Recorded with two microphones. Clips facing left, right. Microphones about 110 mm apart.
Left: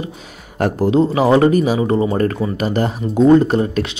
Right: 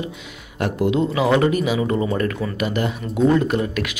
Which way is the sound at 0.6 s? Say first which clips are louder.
Left 5 dB; 40° left (ahead or behind).